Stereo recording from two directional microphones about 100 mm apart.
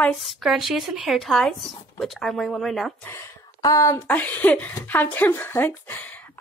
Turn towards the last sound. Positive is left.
turn(degrees=20)  # may be behind; listen again after turning